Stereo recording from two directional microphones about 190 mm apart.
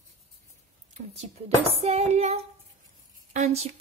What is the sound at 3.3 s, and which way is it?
Speech, 35° right (ahead or behind).